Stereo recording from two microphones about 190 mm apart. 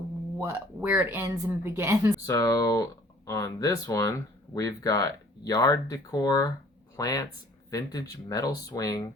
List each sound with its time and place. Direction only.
0.3 s speech: 10° right (ahead or behind)
2.2 s speech: 15° left (ahead or behind)